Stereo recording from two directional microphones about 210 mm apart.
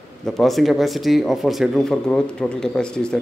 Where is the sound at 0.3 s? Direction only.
Centre (ahead or behind).